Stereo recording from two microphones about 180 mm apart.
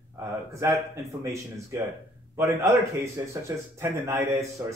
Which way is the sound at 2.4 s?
15° right (ahead or behind).